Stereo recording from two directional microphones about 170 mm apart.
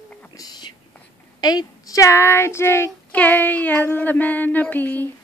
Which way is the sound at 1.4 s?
20° left (ahead or behind).